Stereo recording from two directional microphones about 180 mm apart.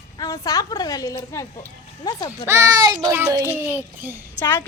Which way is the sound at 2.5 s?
15° right (ahead or behind).